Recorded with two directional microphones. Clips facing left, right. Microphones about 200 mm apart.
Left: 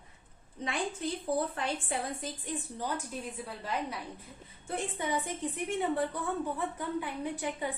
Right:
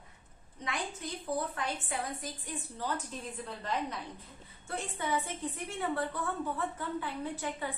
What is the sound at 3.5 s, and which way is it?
A woman's voice, 10° left (ahead or behind).